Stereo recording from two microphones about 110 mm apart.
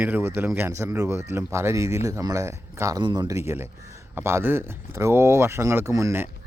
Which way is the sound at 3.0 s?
40° right (ahead or behind).